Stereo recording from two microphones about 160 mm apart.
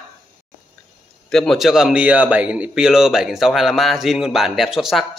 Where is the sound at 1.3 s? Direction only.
Centre (ahead or behind).